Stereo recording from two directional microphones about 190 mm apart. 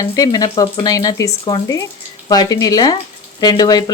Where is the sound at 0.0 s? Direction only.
20° left (ahead or behind).